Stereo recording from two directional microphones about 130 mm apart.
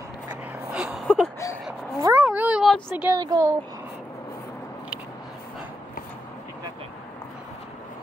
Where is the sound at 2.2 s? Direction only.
10° right (ahead or behind).